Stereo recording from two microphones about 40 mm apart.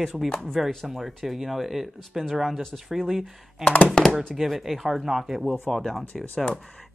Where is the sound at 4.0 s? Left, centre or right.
Centre.